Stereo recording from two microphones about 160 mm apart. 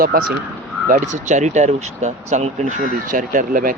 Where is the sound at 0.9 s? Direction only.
50° right (ahead or behind).